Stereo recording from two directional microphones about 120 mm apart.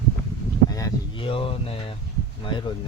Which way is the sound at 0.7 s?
30° left (ahead or behind).